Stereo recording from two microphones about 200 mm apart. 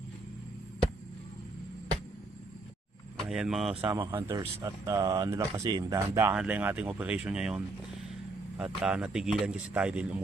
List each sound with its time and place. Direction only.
3.2 s speech: 5° right (ahead or behind)
3.8 s speech: 15° right (ahead or behind)